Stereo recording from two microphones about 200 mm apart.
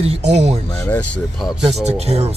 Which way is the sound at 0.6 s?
10° left (ahead or behind).